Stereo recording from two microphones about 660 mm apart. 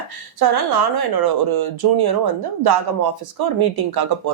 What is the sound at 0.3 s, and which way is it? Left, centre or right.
Speech, right.